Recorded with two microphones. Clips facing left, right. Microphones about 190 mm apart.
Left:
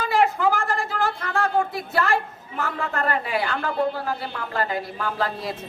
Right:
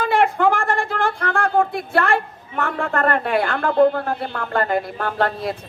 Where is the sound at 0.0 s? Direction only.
55° right (ahead or behind).